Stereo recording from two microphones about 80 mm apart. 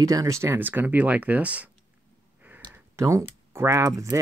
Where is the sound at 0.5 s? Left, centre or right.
Right.